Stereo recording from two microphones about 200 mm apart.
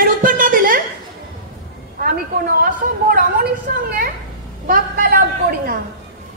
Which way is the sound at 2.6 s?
45° right (ahead or behind).